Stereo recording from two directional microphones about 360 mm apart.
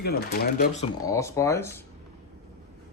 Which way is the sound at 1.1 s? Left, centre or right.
Centre.